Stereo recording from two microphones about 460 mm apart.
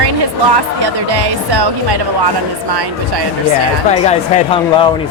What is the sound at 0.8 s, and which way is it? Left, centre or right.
Speech, right.